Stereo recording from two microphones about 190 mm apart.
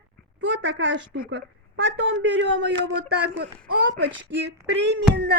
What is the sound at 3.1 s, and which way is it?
A child's voice, 60° right (ahead or behind).